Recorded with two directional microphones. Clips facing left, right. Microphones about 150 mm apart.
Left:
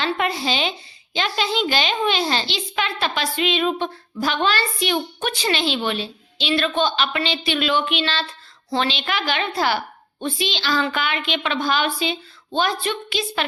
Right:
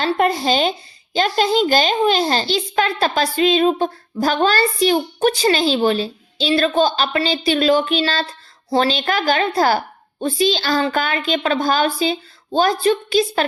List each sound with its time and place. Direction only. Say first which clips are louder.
0.0 s speech: right 5 dB; 45° right (ahead or behind)